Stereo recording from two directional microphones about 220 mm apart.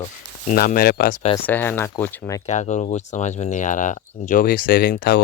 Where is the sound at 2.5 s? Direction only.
30° left (ahead or behind).